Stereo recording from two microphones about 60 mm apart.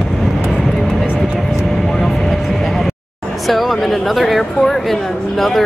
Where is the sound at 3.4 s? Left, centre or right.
Centre.